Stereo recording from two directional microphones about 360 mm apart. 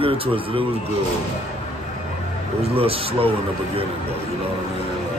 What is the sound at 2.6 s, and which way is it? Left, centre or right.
Speech, centre.